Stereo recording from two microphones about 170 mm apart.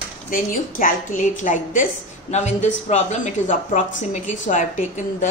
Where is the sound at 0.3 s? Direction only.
55° left (ahead or behind).